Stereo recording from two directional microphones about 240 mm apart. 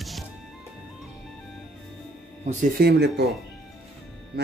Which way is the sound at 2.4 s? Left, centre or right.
Right.